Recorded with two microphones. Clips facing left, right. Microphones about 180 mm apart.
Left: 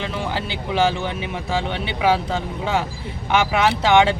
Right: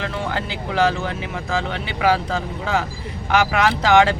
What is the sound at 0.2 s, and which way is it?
Speech, centre (ahead or behind).